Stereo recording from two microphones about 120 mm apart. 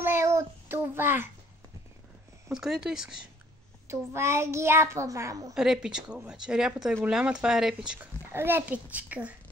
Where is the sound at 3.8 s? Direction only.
20° right (ahead or behind).